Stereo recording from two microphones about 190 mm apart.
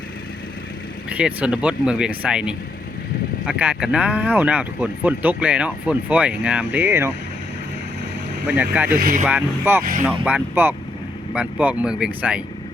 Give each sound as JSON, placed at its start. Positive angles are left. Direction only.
{"t": 1.1, "sound": "speech", "side_deg": -5}
{"t": 8.4, "sound": "speech", "side_deg": -10}
{"t": 9.0, "sound": "speech", "side_deg": -50}
{"t": 9.2, "sound": "speech", "side_deg": -10}